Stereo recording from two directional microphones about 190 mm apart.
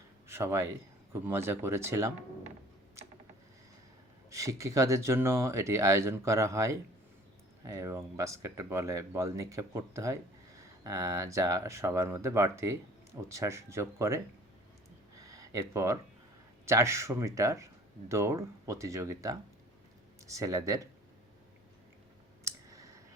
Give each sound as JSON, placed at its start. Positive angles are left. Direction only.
{"t": 0.3, "sound": "speech", "side_deg": -15}
{"t": 4.3, "sound": "speech", "side_deg": -15}
{"t": 15.1, "sound": "a sound", "side_deg": -15}
{"t": 16.6, "sound": "speech", "side_deg": -15}
{"t": 22.4, "sound": "clicking", "side_deg": -15}